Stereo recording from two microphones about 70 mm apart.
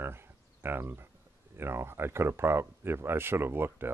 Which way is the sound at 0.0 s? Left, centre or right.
Right.